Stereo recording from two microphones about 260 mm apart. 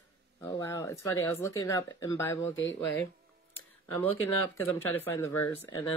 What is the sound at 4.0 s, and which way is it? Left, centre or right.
Speech, centre.